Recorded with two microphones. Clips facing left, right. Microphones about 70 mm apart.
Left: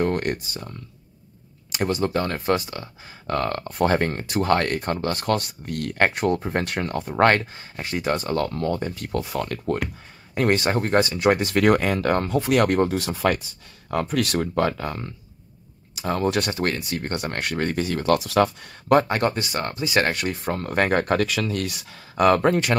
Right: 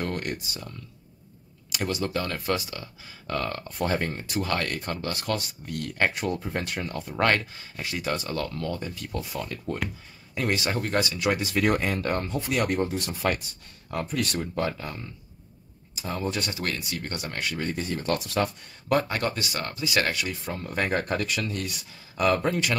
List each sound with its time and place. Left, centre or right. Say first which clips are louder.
0.0 s speech: left 7 dB; left
4.5 s speech: left 10 dB; left
7.1 s speech: left 6 dB; left
9.1 s speech: left 7 dB; left
10.3 s speech: left 6 dB; left
16.6 s speech: left 6 dB; left
18.9 s speech: left 6 dB; left
19.3 s speech: left 5 dB; left